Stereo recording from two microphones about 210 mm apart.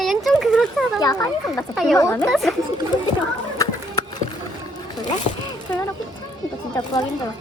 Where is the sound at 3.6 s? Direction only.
15° left (ahead or behind).